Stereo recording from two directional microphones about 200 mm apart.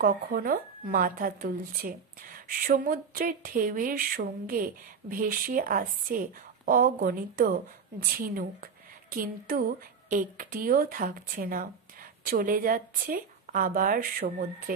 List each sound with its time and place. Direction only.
0.0 s speech: 45° right (ahead or behind)